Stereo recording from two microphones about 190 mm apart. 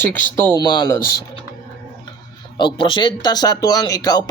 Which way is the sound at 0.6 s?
25° left (ahead or behind).